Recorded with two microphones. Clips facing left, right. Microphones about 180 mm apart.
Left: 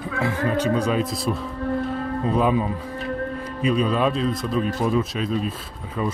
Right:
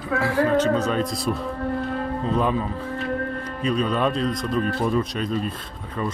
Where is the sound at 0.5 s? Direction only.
10° left (ahead or behind).